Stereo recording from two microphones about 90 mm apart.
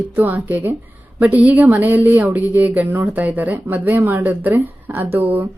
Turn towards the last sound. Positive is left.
turn(degrees=-20)  # may be behind; listen again after turning